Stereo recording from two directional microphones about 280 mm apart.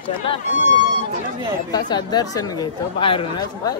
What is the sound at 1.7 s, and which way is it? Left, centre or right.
Speech, centre.